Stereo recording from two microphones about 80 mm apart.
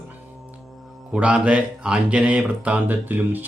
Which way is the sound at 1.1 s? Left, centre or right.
Centre.